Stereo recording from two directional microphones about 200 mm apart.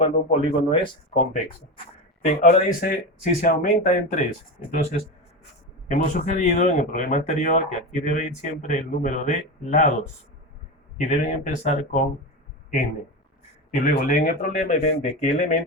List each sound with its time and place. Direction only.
0.0 s speech: 35° left (ahead or behind)
2.2 s speech: 40° left (ahead or behind)
10.9 s speech: 40° left (ahead or behind)
13.7 s speech: 45° left (ahead or behind)